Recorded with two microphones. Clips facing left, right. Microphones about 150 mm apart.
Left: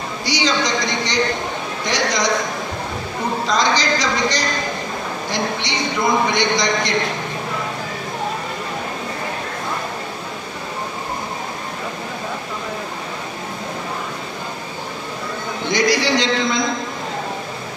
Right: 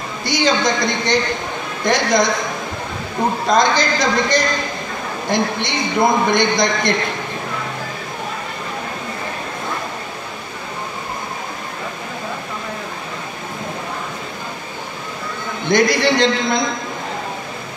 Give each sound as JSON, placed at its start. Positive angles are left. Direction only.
{"t": 0.2, "sound": "a man's voice", "side_deg": -55}
{"t": 3.4, "sound": "a man's voice", "side_deg": -55}
{"t": 15.7, "sound": "a man's voice", "side_deg": -55}